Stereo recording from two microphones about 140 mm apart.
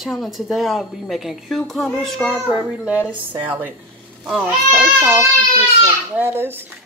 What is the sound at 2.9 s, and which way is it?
A child's voice, 10° right (ahead or behind).